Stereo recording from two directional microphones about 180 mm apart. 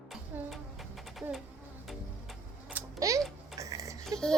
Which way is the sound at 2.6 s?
15° right (ahead or behind).